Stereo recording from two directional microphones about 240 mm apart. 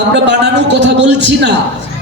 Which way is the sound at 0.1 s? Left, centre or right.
Right.